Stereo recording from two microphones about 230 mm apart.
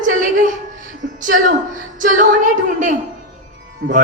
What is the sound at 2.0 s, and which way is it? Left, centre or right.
Female singing, right.